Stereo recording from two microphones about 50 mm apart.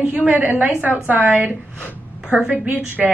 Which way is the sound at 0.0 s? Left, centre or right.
Right.